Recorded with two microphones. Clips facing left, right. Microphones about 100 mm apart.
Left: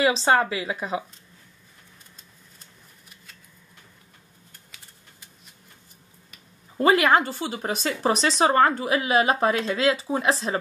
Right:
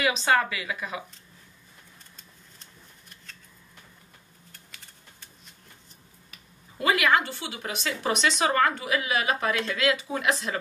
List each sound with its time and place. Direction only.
0.0 s speech: 30° left (ahead or behind)
6.8 s speech: 35° left (ahead or behind)